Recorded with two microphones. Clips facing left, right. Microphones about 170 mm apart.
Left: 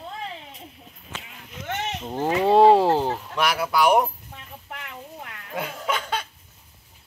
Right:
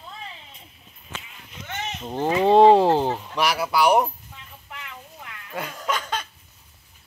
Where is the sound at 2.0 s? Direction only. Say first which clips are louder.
Right 2 dB; 5° left (ahead or behind).